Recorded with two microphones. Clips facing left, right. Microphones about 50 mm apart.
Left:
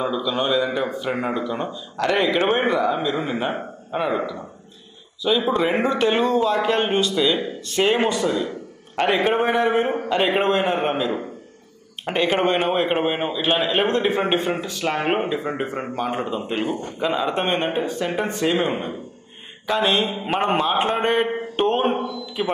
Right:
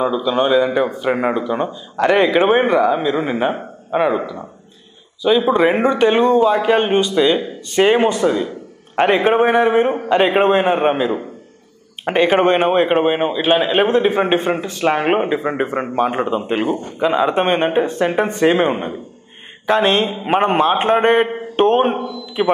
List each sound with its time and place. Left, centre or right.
0.0 s a man's voice: centre
5.5 s a man's voice: centre
8.1 s speech: right
12.3 s speech: right
12.7 s a man's voice: centre
14.7 s a man's voice: right